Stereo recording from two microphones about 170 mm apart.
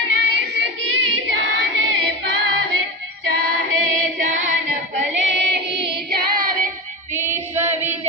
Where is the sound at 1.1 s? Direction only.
90° right.